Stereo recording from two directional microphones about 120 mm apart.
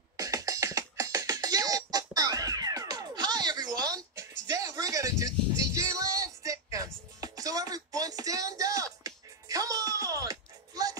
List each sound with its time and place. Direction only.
0.2 s music: 30° right (ahead or behind)